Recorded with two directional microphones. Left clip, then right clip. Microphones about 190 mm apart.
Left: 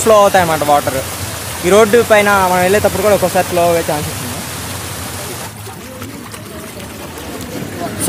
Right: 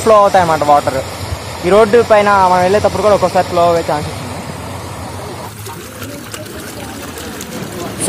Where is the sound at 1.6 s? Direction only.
35° left (ahead or behind).